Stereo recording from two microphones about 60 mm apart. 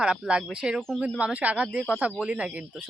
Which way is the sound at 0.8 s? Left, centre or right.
Centre.